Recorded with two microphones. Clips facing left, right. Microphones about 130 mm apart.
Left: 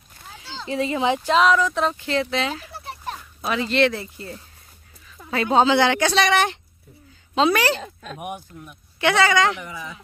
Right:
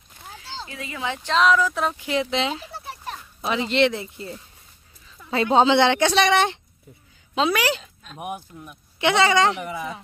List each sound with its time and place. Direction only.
0.7 s speech: 30° left (ahead or behind)
1.3 s speech: centre (ahead or behind); by 2.8 s 20° right (ahead or behind)
2.8 s children playing: centre (ahead or behind)
3.4 s speech: 20° right (ahead or behind)
7.3 s speech: 5° right (ahead or behind)
7.8 s speech: 90° left
8.2 s speech: centre (ahead or behind)
9.0 s speech: 25° right (ahead or behind)